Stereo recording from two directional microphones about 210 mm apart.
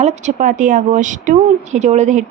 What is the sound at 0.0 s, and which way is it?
Speech, 35° right (ahead or behind).